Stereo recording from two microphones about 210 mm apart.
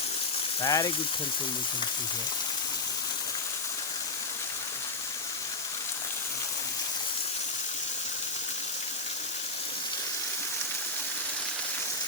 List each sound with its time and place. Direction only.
0.6 s speech: 20° left (ahead or behind)